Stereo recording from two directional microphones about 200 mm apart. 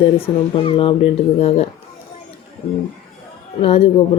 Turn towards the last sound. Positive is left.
turn(degrees=30)  # may be behind; listen again after turning